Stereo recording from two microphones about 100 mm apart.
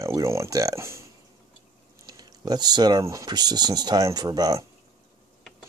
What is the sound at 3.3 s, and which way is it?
Speech, 45° right (ahead or behind).